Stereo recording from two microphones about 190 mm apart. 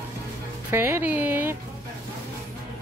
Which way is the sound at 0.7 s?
10° right (ahead or behind).